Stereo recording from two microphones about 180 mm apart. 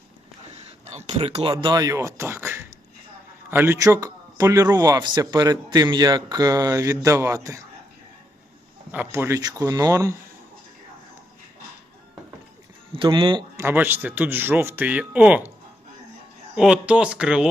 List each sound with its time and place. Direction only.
1.0 s a man's voice: 30° right (ahead or behind); by 7.6 s 15° right (ahead or behind)
8.9 s speech: 10° right (ahead or behind)
12.9 s speech: 30° right (ahead or behind)
13.6 s speech: 10° right (ahead or behind)
16.6 s speech: 5° right (ahead or behind)